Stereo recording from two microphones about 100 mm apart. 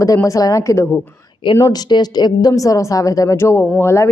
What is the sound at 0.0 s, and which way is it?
A woman's voice, 30° left (ahead or behind).